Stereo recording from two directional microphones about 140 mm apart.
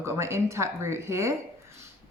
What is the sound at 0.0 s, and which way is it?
Speech, 20° right (ahead or behind).